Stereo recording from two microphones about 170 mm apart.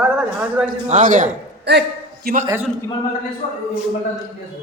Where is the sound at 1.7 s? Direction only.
80° right.